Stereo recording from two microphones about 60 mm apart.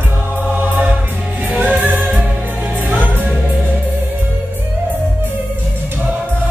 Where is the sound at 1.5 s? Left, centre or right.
Right.